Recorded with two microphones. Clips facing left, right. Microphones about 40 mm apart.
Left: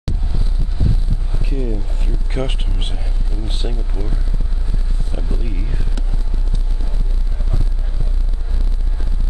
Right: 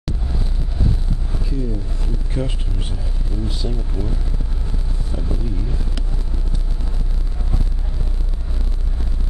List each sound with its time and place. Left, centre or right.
1.5 s a sound: left
2.3 s speech: left
5.1 s music: left